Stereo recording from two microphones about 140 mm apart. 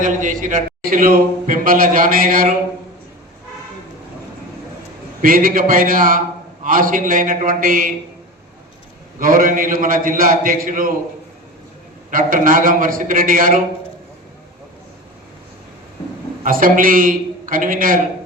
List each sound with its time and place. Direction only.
0.0 s a man's voice: 70° right (ahead or behind); by 2.6 s 85° right
5.2 s a man's voice: 90° right
9.1 s a man's voice: 80° right
12.1 s a man's voice: 75° right (ahead or behind)
16.4 s a man's voice: 85° right